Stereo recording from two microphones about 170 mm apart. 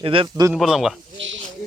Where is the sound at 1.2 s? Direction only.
90° right.